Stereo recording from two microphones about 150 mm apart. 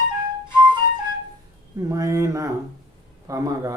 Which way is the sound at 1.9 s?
20° right (ahead or behind).